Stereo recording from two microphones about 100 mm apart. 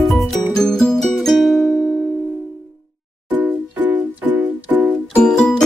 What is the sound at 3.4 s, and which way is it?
Music, 15° right (ahead or behind).